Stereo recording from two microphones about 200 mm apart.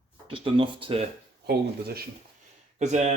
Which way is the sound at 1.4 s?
55° right (ahead or behind).